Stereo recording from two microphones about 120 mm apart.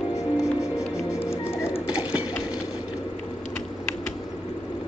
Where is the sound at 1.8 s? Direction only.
10° right (ahead or behind).